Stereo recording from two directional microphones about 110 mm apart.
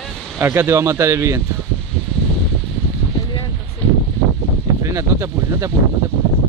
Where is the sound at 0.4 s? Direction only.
20° right (ahead or behind).